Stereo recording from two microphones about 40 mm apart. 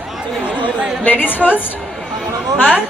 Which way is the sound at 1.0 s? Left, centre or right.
Left.